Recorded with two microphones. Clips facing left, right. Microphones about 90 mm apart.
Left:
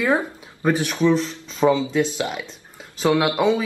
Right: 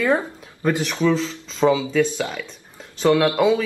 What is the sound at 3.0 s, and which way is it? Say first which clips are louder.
Speech: right 2 dB; 15° left (ahead or behind).